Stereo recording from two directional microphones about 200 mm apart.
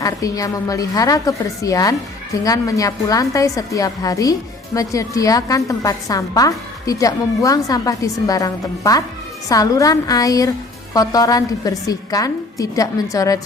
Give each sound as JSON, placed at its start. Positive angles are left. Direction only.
{"t": 0.0, "sound": "a woman's voice", "side_deg": 15}